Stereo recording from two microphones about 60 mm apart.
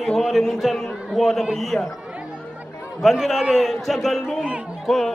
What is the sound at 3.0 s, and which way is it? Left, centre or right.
A man's voice, centre.